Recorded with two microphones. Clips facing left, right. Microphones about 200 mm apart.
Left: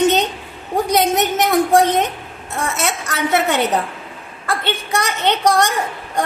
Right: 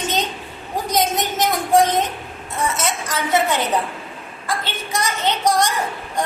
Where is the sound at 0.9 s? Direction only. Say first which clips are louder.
Left 3 dB; 65° left (ahead or behind).